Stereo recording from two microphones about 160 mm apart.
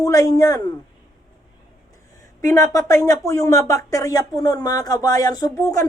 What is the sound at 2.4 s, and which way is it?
Speech, 20° left (ahead or behind).